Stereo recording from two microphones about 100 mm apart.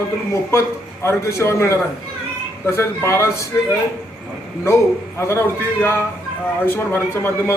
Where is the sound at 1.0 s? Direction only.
30° left (ahead or behind).